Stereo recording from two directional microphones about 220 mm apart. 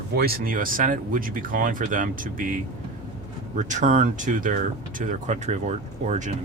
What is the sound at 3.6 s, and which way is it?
Speech, 35° right (ahead or behind).